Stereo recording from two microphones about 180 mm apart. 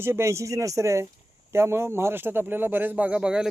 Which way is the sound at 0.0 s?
15° right (ahead or behind).